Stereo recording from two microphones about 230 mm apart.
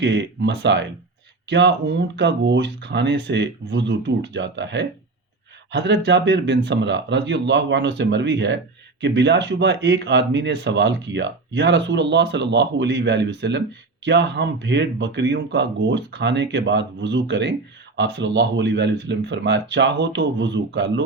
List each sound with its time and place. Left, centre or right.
0.0 s speech: right